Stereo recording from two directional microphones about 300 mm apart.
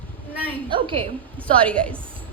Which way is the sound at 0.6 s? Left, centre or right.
Centre.